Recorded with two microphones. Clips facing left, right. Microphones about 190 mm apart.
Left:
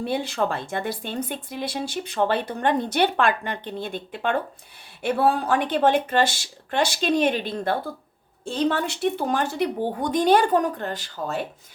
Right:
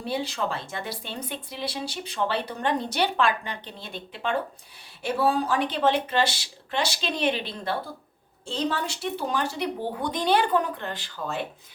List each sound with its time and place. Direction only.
0.0 s speech: 55° left (ahead or behind)